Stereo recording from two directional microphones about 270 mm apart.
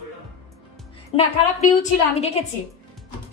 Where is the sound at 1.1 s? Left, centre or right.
Left.